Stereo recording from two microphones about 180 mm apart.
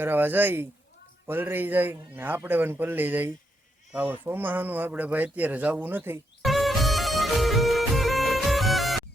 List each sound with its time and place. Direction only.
0.0 s speech: 10° right (ahead or behind)
6.4 s music: centre (ahead or behind)